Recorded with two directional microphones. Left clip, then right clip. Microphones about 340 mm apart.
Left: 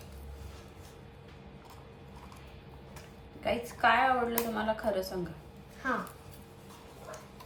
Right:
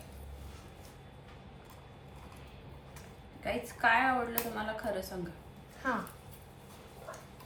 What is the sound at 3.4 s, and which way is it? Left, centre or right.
Speech, centre.